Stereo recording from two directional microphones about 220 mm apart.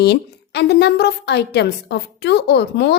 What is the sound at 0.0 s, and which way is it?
A woman's voice, 50° left (ahead or behind).